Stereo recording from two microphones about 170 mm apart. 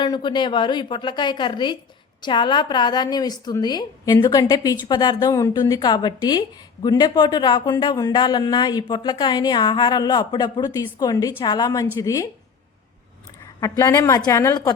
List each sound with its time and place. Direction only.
0.0 s speech: 25° left (ahead or behind)
13.6 s speech: 20° left (ahead or behind)